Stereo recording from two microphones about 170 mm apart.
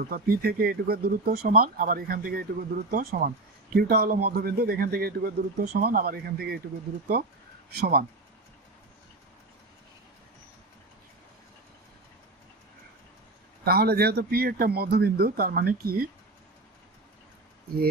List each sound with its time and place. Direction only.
0.0 s a man's voice: 60° right (ahead or behind)
7.7 s a man's voice: 60° right (ahead or behind)
13.7 s a man's voice: 65° right (ahead or behind)